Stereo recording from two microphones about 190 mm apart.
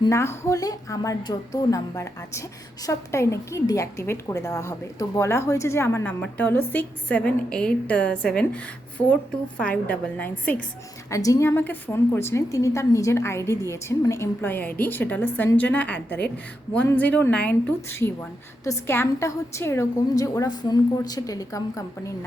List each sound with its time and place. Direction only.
0.0 s a woman's voice: 15° left (ahead or behind)